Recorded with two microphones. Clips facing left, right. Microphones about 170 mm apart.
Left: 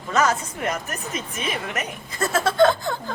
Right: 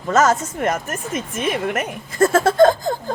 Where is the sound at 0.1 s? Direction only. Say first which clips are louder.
Right 5 dB; 45° right (ahead or behind).